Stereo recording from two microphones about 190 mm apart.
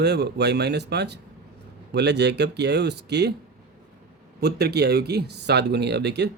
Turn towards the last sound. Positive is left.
turn(degrees=-65)  # may be behind; listen again after turning